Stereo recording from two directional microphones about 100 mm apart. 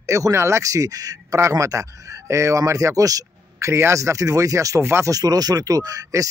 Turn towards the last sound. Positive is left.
turn(degrees=-35)  # may be behind; listen again after turning